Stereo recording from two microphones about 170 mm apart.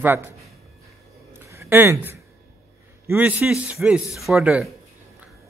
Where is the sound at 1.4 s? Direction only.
15° right (ahead or behind).